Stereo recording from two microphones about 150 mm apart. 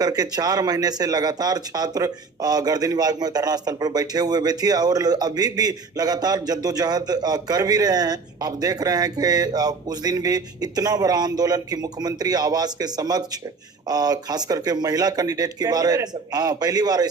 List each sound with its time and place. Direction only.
0.0 s speech: 25° right (ahead or behind)